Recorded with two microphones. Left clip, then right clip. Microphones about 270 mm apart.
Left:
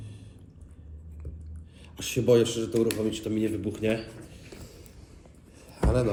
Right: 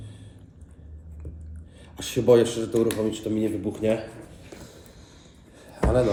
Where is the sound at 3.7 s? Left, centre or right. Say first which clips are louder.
Right 3 dB; centre.